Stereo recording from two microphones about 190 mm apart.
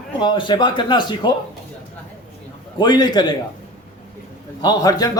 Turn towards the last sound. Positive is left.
turn(degrees=20)  # may be behind; listen again after turning